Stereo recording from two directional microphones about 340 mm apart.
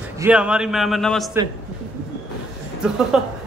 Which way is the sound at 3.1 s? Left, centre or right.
Centre.